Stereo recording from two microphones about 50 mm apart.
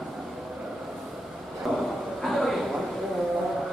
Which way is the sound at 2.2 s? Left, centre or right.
Centre.